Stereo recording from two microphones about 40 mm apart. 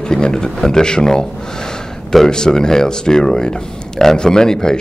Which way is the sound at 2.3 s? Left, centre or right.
Centre.